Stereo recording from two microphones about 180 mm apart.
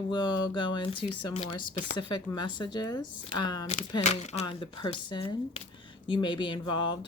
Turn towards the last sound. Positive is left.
turn(degrees=25)  # may be behind; listen again after turning